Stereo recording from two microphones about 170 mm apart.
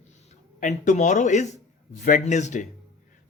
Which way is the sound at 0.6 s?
45° left (ahead or behind).